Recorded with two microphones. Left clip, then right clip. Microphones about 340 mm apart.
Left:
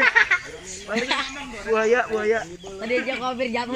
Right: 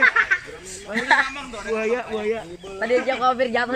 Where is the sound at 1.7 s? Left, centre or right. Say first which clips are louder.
Left 4 dB; left.